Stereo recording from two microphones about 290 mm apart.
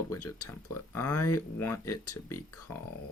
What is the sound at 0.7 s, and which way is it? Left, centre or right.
Speech, left.